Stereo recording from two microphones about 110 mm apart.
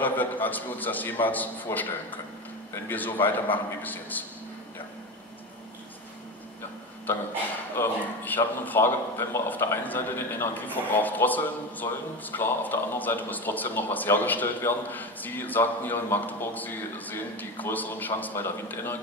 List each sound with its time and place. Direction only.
0.0 s a man's voice: 15° left (ahead or behind)
7.7 s a man's voice: 20° left (ahead or behind)